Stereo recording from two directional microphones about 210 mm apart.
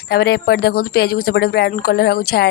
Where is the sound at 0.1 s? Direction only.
45° left (ahead or behind).